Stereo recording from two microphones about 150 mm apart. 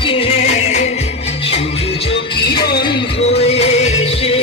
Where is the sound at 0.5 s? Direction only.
50° left (ahead or behind).